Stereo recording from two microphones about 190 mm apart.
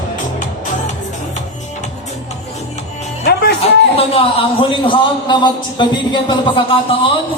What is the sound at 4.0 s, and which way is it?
A man's voice, 30° left (ahead or behind).